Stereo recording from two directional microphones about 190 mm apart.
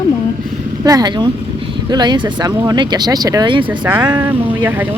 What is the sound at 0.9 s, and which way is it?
Speech, 20° right (ahead or behind).